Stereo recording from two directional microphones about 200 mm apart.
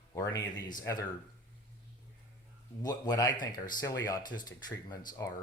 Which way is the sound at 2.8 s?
20° left (ahead or behind).